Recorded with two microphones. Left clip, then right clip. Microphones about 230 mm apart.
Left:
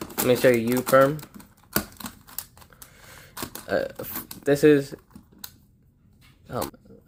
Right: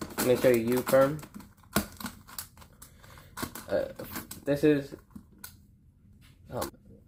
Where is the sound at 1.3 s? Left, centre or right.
Centre.